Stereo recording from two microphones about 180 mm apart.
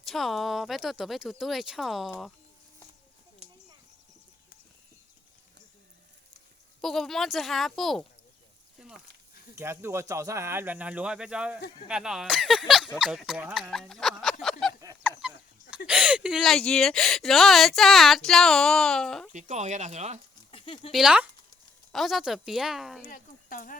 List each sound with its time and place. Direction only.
0.0 s speech: centre (ahead or behind)
6.8 s speech: centre (ahead or behind)
9.6 s speech: 15° right (ahead or behind); by 14.3 s centre (ahead or behind)
14.7 s a sound: 20° right (ahead or behind)
15.2 s a sound: 5° right (ahead or behind)
15.9 s speech: 5° right (ahead or behind)
19.3 s speech: 40° right (ahead or behind)
20.5 s a sound: 30° left (ahead or behind)
20.9 s speech: 5° right (ahead or behind)
23.0 s speech: 50° left (ahead or behind)